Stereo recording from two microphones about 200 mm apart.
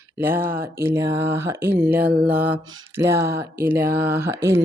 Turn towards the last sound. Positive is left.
turn(degrees=-10)  # may be behind; listen again after turning